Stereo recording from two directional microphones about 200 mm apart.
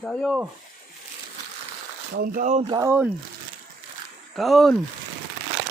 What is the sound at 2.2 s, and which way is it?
Speech, 40° right (ahead or behind).